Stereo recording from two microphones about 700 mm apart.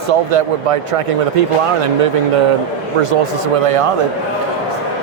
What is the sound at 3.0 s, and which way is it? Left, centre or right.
Speech, right.